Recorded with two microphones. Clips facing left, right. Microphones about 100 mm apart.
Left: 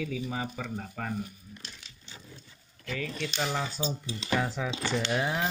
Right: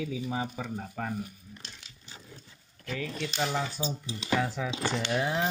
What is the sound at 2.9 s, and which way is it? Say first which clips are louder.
Speech: even; 10° right (ahead or behind).